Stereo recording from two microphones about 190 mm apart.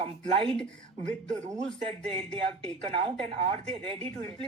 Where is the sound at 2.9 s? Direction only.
30° right (ahead or behind).